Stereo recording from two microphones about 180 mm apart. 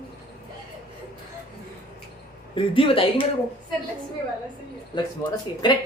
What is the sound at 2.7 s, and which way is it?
Speech, 30° left (ahead or behind).